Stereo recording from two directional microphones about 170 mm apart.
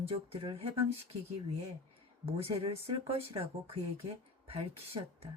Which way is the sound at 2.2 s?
35° right (ahead or behind).